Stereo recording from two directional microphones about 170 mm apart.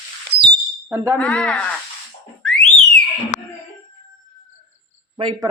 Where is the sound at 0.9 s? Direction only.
15° right (ahead or behind).